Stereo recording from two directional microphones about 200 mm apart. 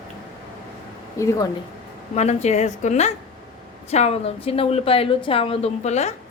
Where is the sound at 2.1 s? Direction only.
35° left (ahead or behind).